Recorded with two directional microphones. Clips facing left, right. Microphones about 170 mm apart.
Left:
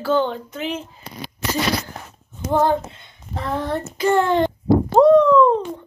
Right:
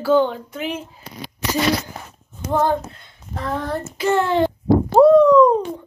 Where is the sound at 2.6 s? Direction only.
Centre (ahead or behind).